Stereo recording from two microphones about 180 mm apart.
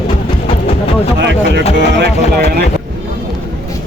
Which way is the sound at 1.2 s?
80° right.